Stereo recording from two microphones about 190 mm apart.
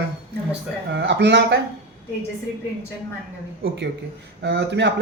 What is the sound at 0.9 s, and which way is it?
Speech, 60° right (ahead or behind).